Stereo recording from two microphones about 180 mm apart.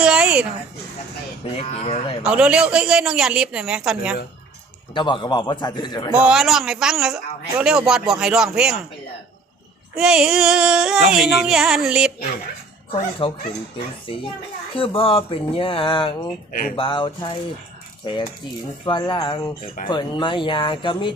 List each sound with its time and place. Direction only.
0.0 s a sound: 5° right (ahead or behind)
1.5 s speech: 35° left (ahead or behind)
2.2 s a man's voice: 5° right (ahead or behind)
4.9 s speech: 25° left (ahead or behind)
6.1 s a man's voice: 5° right (ahead or behind)
9.9 s a man's voice: 5° right (ahead or behind)
12.9 s speech: 30° left (ahead or behind)
14.8 s speech: 30° left (ahead or behind)
16.5 s speech: 50° left (ahead or behind)
16.7 s speech: 30° left (ahead or behind)
18.0 s keys jangling: 25° left (ahead or behind)
18.9 s speech: 25° left (ahead or behind)